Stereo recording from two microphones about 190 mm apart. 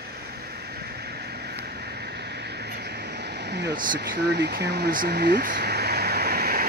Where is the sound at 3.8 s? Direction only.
50° right (ahead or behind).